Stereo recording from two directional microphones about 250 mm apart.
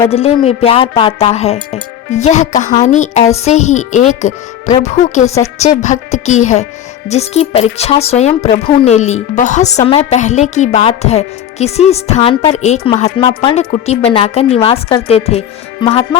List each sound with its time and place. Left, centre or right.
0.1 s a woman's voice: left